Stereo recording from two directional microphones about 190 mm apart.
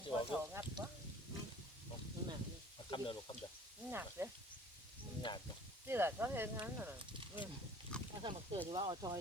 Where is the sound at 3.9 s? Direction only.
10° right (ahead or behind).